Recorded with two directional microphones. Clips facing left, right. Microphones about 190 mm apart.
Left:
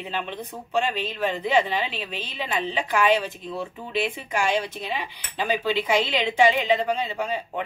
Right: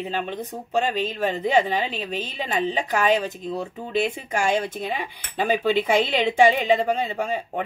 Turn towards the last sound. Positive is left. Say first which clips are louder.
# right 2 dB
turn(degrees=-50)  # may be behind; listen again after turning